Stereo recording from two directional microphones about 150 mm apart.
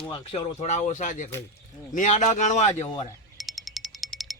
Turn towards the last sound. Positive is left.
turn(degrees=0)  # may be behind; listen again after turning